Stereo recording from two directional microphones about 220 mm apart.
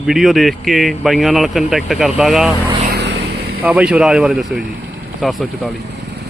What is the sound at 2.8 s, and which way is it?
Vehicle, 45° right (ahead or behind).